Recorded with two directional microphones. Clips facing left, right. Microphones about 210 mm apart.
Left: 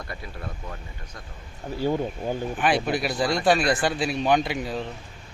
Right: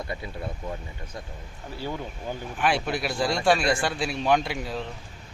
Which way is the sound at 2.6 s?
Centre (ahead or behind).